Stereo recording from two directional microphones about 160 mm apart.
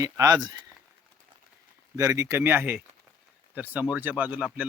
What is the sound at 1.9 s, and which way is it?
Speech, 20° right (ahead or behind).